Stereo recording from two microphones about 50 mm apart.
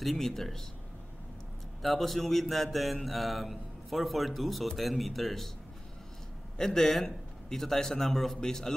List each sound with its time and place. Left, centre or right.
0.0 s a man's voice: centre
1.8 s a man's voice: centre
6.6 s a man's voice: centre